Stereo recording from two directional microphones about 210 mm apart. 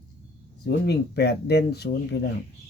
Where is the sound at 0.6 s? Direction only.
50° left (ahead or behind).